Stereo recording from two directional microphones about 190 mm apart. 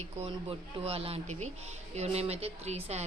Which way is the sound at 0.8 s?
30° right (ahead or behind).